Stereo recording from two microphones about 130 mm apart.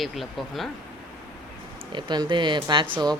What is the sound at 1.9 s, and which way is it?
Speech, 35° right (ahead or behind).